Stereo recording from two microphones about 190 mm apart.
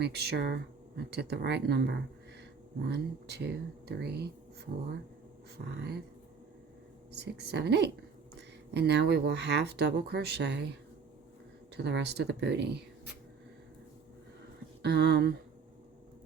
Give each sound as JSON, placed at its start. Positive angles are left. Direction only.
{"t": 0.0, "sound": "speech", "side_deg": -60}
{"t": 7.1, "sound": "speech", "side_deg": -60}
{"t": 11.8, "sound": "speech", "side_deg": -65}
{"t": 14.8, "sound": "speech", "side_deg": -60}